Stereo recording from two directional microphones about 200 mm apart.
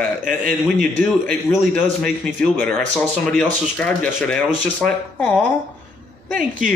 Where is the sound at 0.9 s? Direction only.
5° left (ahead or behind).